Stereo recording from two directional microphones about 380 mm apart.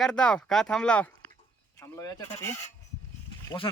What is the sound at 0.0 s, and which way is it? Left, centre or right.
Speech, centre.